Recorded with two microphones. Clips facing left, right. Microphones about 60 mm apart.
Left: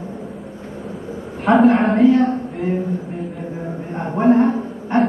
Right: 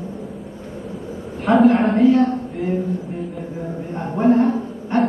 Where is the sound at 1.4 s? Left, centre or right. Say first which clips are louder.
Left 1 dB; centre.